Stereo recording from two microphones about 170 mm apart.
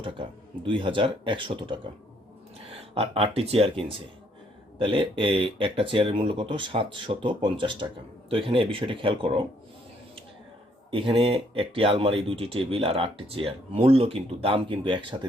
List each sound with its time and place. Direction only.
0.0 s speech: 30° right (ahead or behind)
10.9 s speech: 30° right (ahead or behind)